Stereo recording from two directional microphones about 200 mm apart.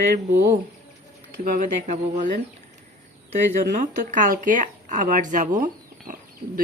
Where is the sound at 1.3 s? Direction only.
45° right (ahead or behind).